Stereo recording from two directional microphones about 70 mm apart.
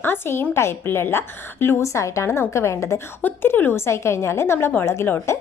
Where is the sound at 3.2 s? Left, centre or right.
Left.